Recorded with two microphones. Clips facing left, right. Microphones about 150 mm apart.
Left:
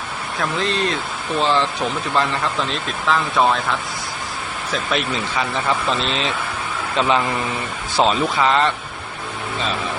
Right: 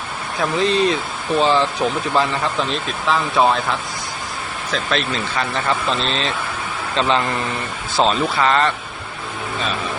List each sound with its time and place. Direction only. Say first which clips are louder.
0.3 s speech: right 4 dB; centre (ahead or behind)
4.7 s speech: right 1 dB; 10° left (ahead or behind)
7.9 s speech: even; 15° left (ahead or behind)